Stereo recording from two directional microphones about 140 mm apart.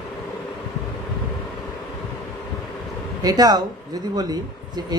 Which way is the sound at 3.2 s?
25° right (ahead or behind).